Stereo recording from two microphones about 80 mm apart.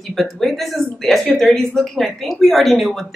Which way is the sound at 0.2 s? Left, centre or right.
Centre.